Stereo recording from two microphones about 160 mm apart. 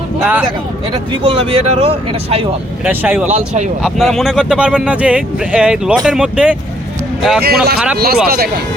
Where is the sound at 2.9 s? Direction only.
10° right (ahead or behind).